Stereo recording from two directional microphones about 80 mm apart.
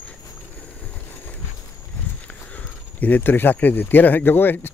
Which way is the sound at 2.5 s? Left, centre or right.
Left.